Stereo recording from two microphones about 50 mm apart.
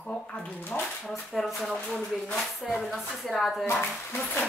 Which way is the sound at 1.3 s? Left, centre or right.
Centre.